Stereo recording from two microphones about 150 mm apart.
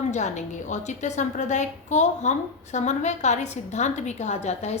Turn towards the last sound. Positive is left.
turn(degrees=50)  # may be behind; listen again after turning